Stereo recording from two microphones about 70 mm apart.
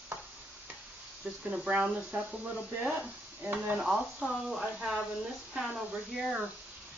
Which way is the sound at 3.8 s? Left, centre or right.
Centre.